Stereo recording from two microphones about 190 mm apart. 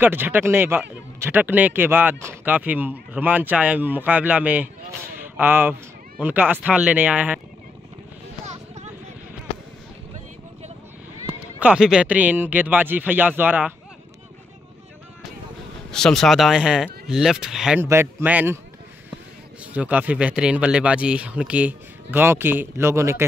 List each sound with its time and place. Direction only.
0.0 s speech: 10° right (ahead or behind)
8.5 s a sound: 35° right (ahead or behind)
11.2 s speech: 5° right (ahead or behind)
15.9 s speech: 5° left (ahead or behind)
19.6 s speech: 5° right (ahead or behind)